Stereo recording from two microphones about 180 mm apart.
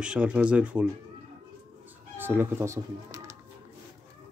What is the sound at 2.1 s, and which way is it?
Speech, 10° right (ahead or behind).